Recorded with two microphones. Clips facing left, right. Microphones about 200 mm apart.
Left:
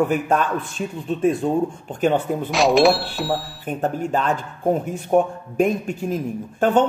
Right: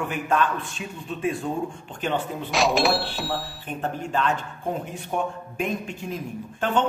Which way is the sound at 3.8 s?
40° left (ahead or behind).